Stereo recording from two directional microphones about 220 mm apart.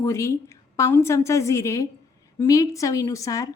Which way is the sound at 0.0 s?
15° left (ahead or behind).